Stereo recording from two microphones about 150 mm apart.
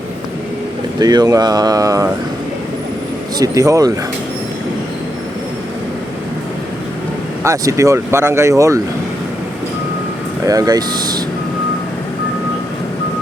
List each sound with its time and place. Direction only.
0.9 s speech: 25° right (ahead or behind)
3.3 s speech: 25° right (ahead or behind)
7.4 s speech: 20° right (ahead or behind)
10.4 s speech: 25° right (ahead or behind)